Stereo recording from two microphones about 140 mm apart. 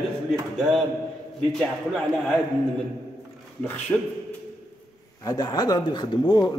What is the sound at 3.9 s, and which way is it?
Speech, 15° left (ahead or behind).